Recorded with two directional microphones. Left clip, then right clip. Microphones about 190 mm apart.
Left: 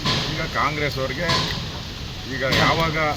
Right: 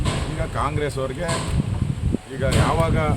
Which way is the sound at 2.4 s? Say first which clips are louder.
Left 3 dB; 20° right (ahead or behind).